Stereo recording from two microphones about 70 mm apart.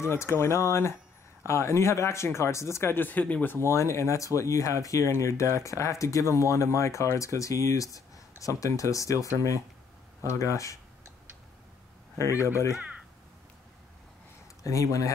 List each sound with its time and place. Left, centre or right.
0.0 s speech: left
3.5 s speech: left
12.2 s speech: left
14.6 s speech: left